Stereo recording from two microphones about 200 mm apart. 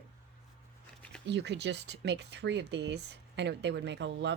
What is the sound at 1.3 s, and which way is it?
Speech, 60° right (ahead or behind).